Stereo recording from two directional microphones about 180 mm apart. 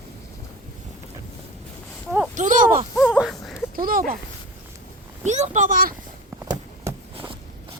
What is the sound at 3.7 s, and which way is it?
Speech, 55° right (ahead or behind).